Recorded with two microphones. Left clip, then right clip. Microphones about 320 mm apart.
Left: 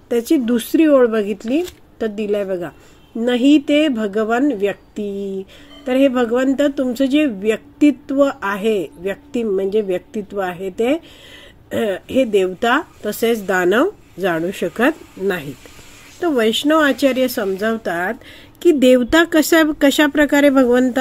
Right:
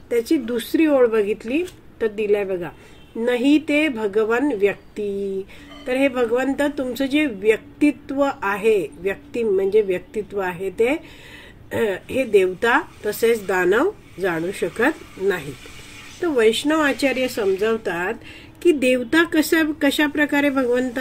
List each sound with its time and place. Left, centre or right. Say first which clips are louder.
0.1 s a woman's voice: left 3 dB; left
5.9 s a woman's voice: left 4 dB; left